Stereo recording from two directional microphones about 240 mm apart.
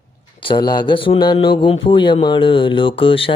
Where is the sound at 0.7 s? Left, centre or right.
Centre.